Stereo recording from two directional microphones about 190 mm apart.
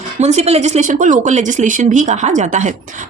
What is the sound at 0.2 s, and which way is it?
Speech, 35° right (ahead or behind).